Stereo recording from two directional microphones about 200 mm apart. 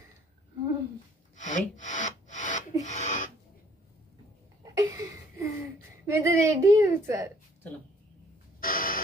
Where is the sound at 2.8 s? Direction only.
35° left (ahead or behind).